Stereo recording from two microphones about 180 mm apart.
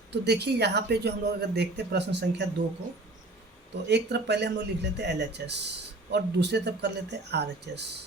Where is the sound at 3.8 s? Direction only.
70° right (ahead or behind).